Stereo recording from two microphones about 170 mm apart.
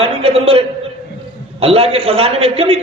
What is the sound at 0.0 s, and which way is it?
A man's voice, 35° right (ahead or behind).